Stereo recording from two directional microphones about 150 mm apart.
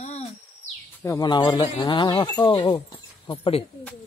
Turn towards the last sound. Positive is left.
turn(degrees=35)  # may be behind; listen again after turning